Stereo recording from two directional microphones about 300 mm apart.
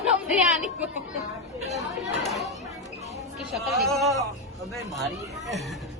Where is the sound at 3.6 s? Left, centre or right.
Centre.